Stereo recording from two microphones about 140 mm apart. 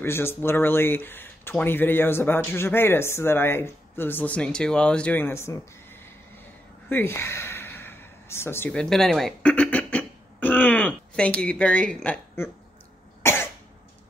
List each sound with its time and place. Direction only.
0.0 s speech: 15° left (ahead or behind)
6.9 s gasp: 15° left (ahead or behind)
8.7 s a sound: 5° left (ahead or behind)
13.2 s cough: 15° left (ahead or behind)